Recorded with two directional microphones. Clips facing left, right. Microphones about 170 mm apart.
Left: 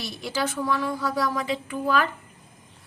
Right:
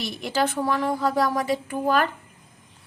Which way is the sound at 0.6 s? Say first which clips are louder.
Right 3 dB; 50° right (ahead or behind).